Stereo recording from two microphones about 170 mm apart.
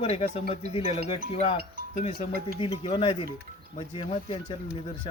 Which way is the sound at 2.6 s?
30° left (ahead or behind).